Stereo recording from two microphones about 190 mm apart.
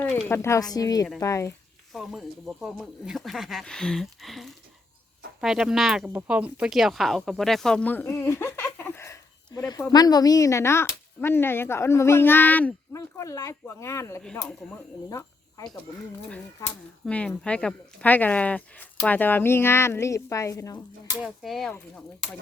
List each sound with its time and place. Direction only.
0.0 s speech: 10° left (ahead or behind)
1.9 s speech: centre (ahead or behind)
14.2 s speech: 5° left (ahead or behind)
15.1 s cricket: 20° left (ahead or behind)
17.1 s speech: 5° left (ahead or behind)
21.2 s speech: centre (ahead or behind)